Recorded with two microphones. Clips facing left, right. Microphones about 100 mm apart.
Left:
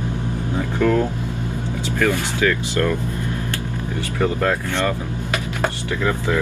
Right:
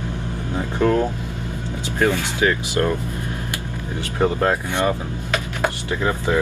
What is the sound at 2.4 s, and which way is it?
Speech, 25° right (ahead or behind).